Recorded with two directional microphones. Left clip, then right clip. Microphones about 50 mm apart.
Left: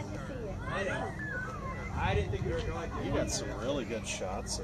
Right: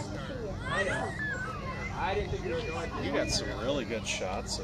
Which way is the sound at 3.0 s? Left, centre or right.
Right.